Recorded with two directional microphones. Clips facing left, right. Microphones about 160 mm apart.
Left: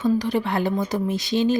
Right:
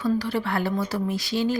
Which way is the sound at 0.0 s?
20° left (ahead or behind).